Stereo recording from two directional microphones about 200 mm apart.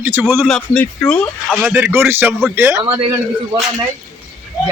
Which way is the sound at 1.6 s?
10° right (ahead or behind).